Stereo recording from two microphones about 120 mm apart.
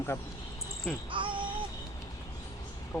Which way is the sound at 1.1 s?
45° right (ahead or behind).